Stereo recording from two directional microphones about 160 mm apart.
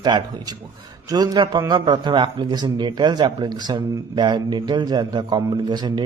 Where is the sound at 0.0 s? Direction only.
25° right (ahead or behind).